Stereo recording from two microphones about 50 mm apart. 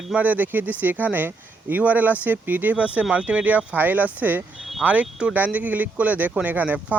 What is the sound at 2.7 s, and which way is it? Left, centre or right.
Speech, right.